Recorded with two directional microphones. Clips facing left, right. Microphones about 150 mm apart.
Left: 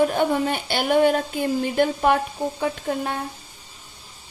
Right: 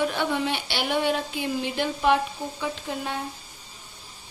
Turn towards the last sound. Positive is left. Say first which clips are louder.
# left 5 dB
turn(degrees=50)  # may be behind; listen again after turning